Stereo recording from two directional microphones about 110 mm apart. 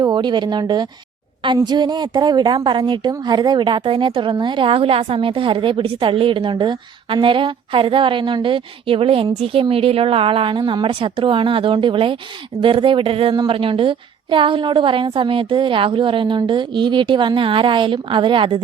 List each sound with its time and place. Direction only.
0.0 s a woman's voice: 40° right (ahead or behind)